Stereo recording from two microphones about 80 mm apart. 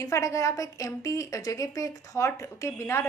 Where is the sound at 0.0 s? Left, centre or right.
Left.